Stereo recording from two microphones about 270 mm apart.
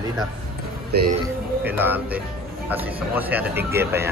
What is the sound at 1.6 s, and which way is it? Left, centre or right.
Speech, centre.